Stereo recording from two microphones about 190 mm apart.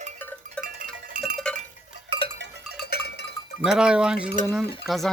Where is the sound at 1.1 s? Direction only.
45° right (ahead or behind).